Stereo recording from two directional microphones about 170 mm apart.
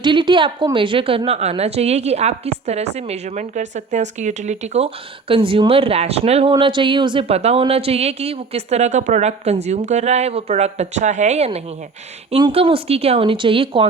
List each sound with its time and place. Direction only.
0.0 s speech: 30° right (ahead or behind)